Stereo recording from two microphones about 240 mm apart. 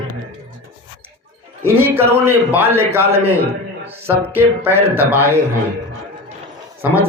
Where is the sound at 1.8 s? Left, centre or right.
Centre.